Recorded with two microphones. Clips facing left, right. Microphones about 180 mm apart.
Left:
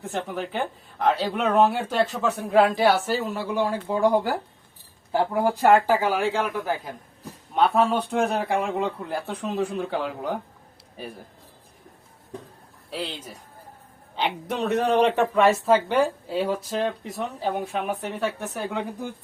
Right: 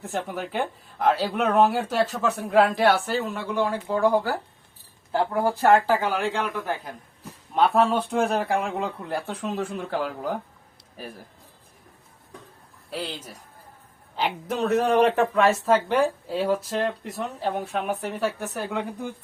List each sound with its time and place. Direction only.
0.1 s speech: 5° right (ahead or behind); by 4.4 s 15° left (ahead or behind)
5.1 s speech: 5° left (ahead or behind)
12.9 s speech: centre (ahead or behind)